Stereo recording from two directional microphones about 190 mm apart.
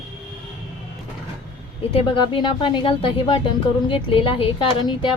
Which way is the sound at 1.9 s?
30° left (ahead or behind).